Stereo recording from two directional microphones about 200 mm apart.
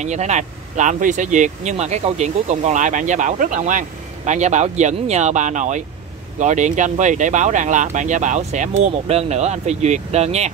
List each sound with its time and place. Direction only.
0.0 s speech: 35° right (ahead or behind)